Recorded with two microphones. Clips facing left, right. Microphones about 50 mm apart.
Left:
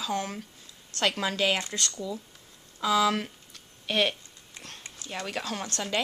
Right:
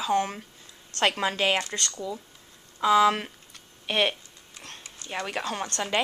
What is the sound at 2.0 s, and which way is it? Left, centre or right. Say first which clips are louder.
Speech: right 1 dB; centre.